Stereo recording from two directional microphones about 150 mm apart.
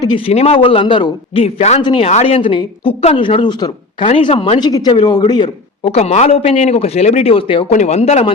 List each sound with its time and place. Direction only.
0.0 s speech: 30° left (ahead or behind)
1.8 s speech: 30° left (ahead or behind)
2.0 s speech: 45° left (ahead or behind)
5.9 s speech: 45° left (ahead or behind)
7.7 s speech: 50° left (ahead or behind)